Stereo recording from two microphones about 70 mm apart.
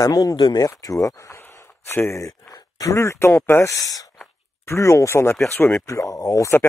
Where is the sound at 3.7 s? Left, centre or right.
Left.